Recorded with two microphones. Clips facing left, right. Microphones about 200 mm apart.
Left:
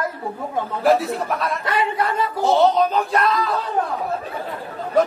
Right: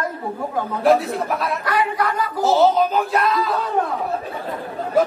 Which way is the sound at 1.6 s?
25° left (ahead or behind).